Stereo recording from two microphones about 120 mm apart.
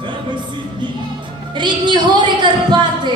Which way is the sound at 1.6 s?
40° right (ahead or behind).